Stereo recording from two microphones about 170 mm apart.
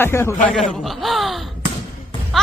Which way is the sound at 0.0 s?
15° left (ahead or behind).